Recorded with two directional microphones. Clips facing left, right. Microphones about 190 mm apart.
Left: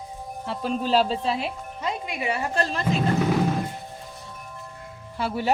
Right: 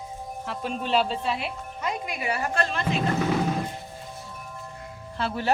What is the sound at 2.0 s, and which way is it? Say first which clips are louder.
Speech: left 2 dB; 25° left (ahead or behind).